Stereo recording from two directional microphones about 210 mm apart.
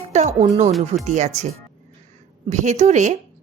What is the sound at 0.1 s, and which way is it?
A woman's voice, 30° right (ahead or behind).